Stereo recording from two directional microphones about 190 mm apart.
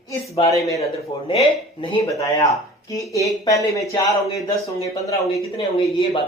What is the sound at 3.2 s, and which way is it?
Speech, 15° left (ahead or behind).